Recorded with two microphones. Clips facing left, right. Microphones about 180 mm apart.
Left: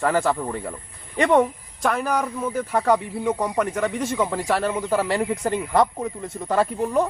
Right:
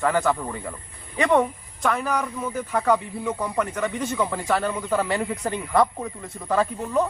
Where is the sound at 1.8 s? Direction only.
40° left (ahead or behind).